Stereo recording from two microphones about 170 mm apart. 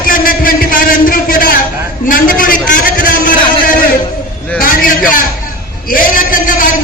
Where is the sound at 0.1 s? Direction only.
55° left (ahead or behind).